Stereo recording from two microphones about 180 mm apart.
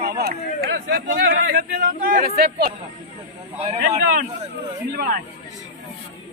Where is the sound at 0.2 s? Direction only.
55° right (ahead or behind).